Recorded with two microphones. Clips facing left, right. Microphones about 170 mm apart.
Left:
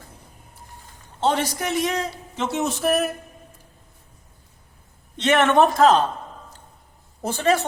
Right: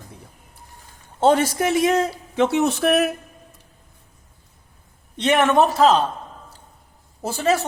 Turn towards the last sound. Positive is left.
turn(degrees=-5)  # may be behind; listen again after turning